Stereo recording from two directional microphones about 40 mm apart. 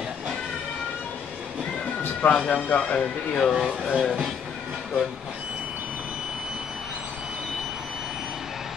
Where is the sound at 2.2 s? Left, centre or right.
Left.